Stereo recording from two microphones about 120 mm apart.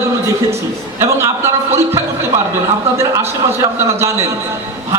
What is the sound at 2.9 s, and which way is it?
Speech, 25° right (ahead or behind).